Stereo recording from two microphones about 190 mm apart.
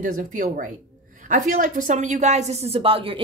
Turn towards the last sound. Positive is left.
turn(degrees=-30)  # may be behind; listen again after turning